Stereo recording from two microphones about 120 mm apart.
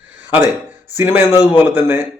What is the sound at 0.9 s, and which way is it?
A man's voice, 15° right (ahead or behind).